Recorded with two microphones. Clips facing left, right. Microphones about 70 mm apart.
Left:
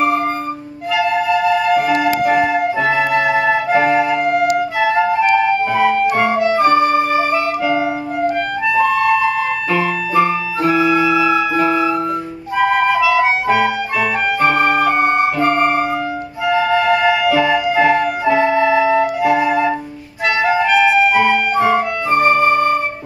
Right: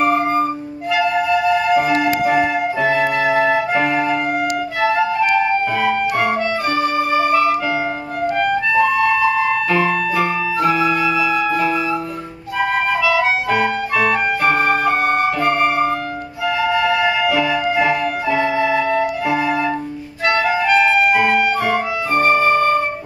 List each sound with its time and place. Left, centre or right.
0.9 s flute: centre
2.0 s music: centre
4.7 s violin: centre
6.0 s music: left
6.6 s music: left
10.1 s music: centre
13.0 s music: centre
14.6 s flute: centre
16.4 s music: left
17.2 s music: centre
18.8 s music: centre
21.1 s music: centre
22.1 s music: left